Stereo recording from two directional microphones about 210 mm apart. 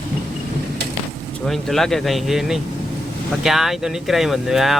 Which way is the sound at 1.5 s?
Centre (ahead or behind).